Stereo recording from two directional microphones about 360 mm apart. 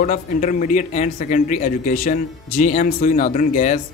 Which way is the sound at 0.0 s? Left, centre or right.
Left.